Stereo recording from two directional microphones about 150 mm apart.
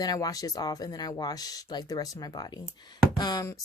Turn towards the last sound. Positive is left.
turn(degrees=25)  # may be behind; listen again after turning